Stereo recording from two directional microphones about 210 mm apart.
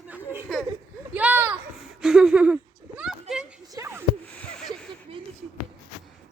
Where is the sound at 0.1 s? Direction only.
5° right (ahead or behind).